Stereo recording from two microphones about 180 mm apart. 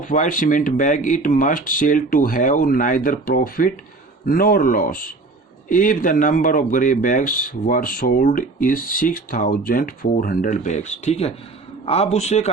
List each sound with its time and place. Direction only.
0.0 s speech: 45° left (ahead or behind)